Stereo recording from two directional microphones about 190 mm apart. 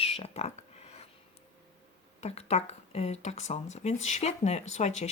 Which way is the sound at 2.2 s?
35° left (ahead or behind).